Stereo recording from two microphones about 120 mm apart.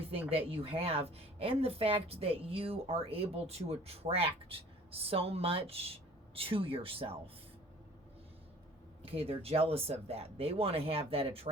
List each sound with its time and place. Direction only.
0.3 s a woman's voice: 50° right (ahead or behind)
9.0 s speech: 55° right (ahead or behind)